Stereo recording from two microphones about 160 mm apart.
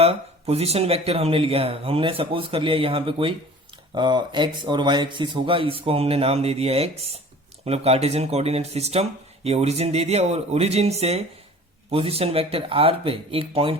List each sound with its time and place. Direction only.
0.0 s speech: 40° right (ahead or behind)